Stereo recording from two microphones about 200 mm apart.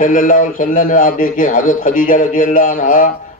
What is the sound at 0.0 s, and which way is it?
A man's voice, 40° left (ahead or behind).